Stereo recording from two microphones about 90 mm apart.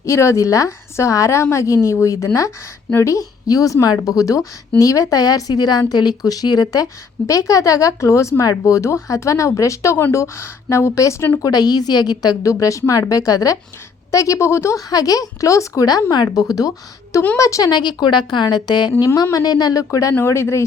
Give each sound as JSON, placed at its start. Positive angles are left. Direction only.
{"t": 0.0, "sound": "a woman's voice", "side_deg": 30}
{"t": 7.3, "sound": "speech", "side_deg": 35}
{"t": 11.4, "sound": "speech", "side_deg": 45}
{"t": 17.7, "sound": "a woman's voice", "side_deg": 55}